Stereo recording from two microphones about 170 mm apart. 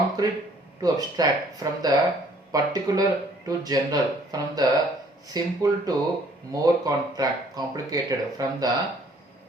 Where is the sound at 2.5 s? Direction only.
20° right (ahead or behind).